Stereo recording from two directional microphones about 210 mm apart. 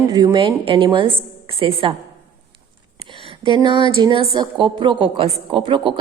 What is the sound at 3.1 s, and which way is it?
A woman's voice, 25° right (ahead or behind).